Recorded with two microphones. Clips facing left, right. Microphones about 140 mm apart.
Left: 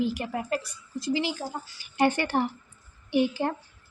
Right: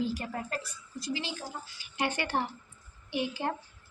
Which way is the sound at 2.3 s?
55° left (ahead or behind).